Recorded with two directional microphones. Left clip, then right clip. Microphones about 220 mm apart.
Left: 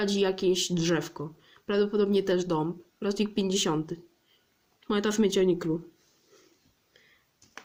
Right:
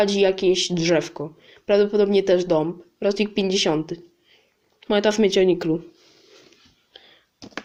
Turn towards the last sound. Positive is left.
turn(degrees=20)  # may be behind; listen again after turning